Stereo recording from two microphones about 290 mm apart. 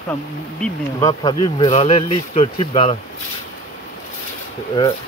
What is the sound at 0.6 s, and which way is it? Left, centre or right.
Speech, centre.